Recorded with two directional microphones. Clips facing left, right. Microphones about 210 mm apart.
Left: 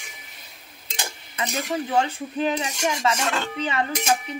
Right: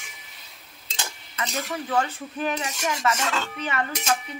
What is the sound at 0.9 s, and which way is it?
Cutlery, 15° left (ahead or behind).